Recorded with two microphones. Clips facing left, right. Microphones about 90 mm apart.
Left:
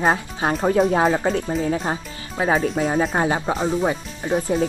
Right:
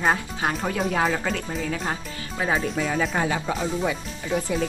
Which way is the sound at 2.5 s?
40° left (ahead or behind).